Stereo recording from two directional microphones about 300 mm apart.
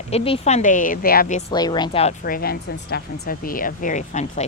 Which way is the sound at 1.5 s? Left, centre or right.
Centre.